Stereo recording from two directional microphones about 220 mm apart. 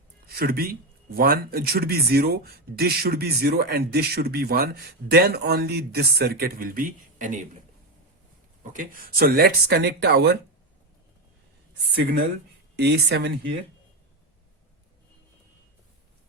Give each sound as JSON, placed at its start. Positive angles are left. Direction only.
{"t": 0.3, "sound": "speech", "side_deg": -45}
{"t": 8.7, "sound": "speech", "side_deg": -40}
{"t": 12.7, "sound": "speech", "side_deg": -50}